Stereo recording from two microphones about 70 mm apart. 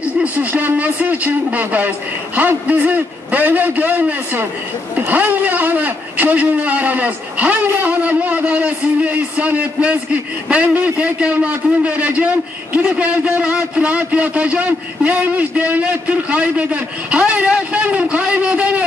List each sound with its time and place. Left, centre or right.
0.2 s a man's voice: right